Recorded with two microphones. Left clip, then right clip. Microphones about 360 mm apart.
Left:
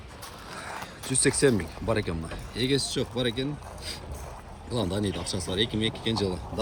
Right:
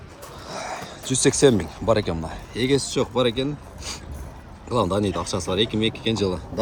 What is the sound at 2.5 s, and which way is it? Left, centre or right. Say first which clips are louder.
Speech: right 5 dB; right.